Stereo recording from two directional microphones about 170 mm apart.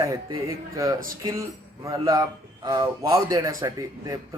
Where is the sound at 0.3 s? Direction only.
15° right (ahead or behind).